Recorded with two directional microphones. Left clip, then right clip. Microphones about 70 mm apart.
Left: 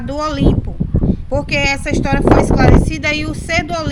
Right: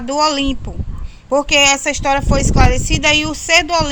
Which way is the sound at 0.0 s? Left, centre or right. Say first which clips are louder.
Right 3 dB; left.